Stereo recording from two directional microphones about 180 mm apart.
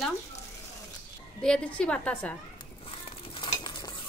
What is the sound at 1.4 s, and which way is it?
A woman's voice, 5° left (ahead or behind).